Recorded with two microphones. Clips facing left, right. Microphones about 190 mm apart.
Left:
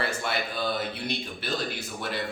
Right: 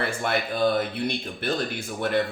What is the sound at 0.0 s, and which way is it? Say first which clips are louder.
A man's voice: right 3 dB; 50° right (ahead or behind).